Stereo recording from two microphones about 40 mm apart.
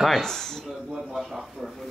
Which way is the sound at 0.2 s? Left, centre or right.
Centre.